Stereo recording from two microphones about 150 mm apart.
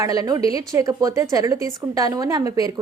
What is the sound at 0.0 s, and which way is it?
A woman's voice, 25° right (ahead or behind).